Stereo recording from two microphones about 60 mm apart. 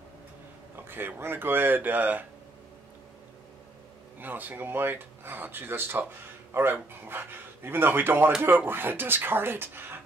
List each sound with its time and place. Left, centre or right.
0.7 s speech: right
4.2 s speech: right